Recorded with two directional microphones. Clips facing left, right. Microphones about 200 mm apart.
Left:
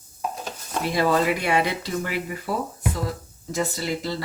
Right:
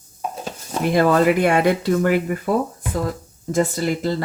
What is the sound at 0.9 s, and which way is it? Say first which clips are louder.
Speech: right 6 dB; 50° right (ahead or behind).